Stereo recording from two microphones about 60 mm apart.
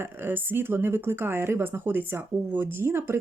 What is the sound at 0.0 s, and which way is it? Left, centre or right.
Speech, right.